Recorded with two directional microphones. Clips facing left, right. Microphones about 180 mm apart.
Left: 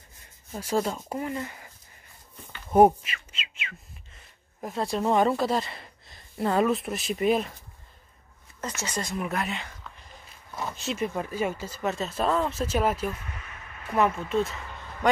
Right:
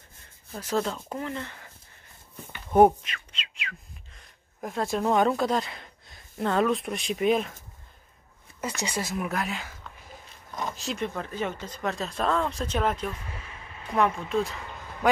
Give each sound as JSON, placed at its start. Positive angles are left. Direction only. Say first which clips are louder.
{"t": 0.5, "sound": "speech", "louder": "left 1 dB", "side_deg": 10}
{"t": 2.7, "sound": "speech", "louder": "even", "side_deg": 5}
{"t": 8.5, "sound": "speech", "louder": "right 2 dB", "side_deg": -10}
{"t": 10.5, "sound": "a sound", "louder": "even", "side_deg": 5}
{"t": 11.1, "sound": "speech", "louder": "left 3 dB", "side_deg": 10}
{"t": 13.3, "sound": "a sound", "louder": "right 1 dB", "side_deg": -30}
{"t": 13.8, "sound": "speech", "louder": "left 1 dB", "side_deg": 5}